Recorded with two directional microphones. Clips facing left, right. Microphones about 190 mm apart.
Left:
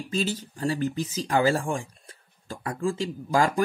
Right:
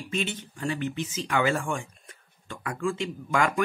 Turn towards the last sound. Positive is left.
turn(degrees=35)  # may be behind; listen again after turning